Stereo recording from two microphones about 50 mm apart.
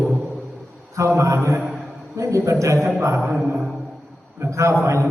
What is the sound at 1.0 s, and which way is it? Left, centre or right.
Speech, right.